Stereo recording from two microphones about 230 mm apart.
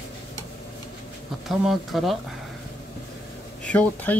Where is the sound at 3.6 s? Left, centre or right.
Centre.